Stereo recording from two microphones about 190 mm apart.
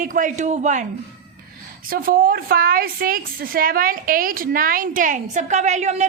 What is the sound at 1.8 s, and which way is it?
A woman's voice, 50° right (ahead or behind).